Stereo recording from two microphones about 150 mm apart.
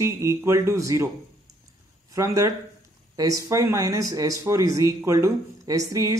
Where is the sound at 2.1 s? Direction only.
20° right (ahead or behind).